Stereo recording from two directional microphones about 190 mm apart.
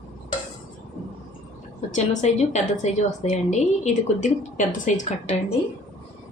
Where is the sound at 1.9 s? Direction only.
35° left (ahead or behind).